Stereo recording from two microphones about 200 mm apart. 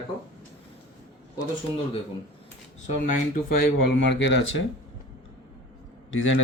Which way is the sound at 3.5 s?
55° left (ahead or behind).